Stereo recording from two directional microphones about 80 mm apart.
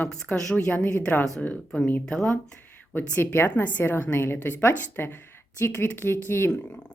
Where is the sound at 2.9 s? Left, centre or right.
Left.